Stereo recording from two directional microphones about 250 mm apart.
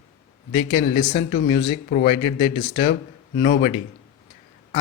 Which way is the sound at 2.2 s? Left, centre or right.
Centre.